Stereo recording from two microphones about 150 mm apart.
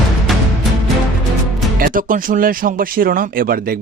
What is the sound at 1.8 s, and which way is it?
Speech, 65° right (ahead or behind).